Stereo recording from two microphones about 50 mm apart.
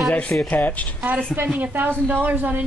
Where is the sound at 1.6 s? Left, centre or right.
Right.